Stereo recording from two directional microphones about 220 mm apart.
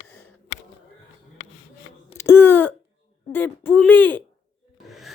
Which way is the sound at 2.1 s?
10° left (ahead or behind).